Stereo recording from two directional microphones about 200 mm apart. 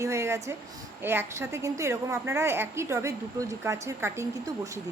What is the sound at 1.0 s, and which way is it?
A woman's voice, 10° right (ahead or behind).